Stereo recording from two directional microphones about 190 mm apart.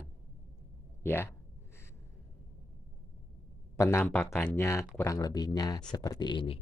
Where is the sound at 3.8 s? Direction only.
15° left (ahead or behind).